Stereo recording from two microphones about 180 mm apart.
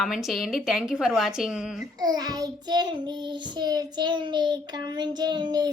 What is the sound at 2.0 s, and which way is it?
Child singing, 20° right (ahead or behind).